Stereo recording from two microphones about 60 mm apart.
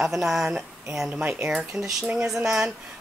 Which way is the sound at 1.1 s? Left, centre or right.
Centre.